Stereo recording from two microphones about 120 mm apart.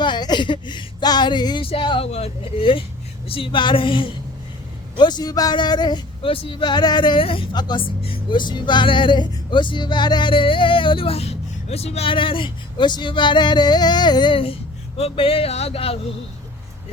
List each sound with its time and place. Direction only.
0.0 s a sound: 40° left (ahead or behind)
2.1 s speech: 55° left (ahead or behind)
7.5 s speech: 35° left (ahead or behind); by 16.0 s 55° left (ahead or behind)